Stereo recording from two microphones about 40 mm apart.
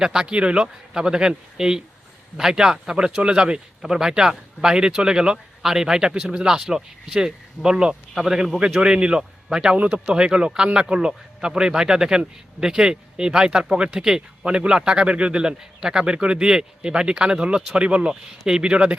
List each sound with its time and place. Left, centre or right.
0.0 s a man's voice: centre
0.3 s a man's voice: right; by 8.4 s centre
8.8 s a man's voice: right
18.1 s a man's voice: centre